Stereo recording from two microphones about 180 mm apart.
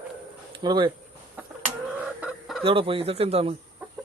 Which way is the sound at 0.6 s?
25° right (ahead or behind).